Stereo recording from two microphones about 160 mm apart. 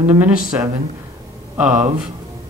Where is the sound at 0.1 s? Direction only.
15° right (ahead or behind).